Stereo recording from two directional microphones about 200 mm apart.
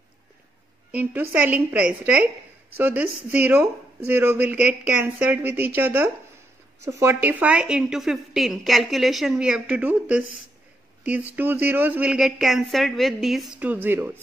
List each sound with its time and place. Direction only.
0.9 s a woman's voice: 10° right (ahead or behind)
11.3 s speech: 10° right (ahead or behind)